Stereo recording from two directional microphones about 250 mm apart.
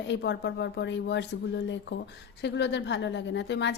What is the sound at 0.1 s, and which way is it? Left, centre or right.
A woman's voice, left.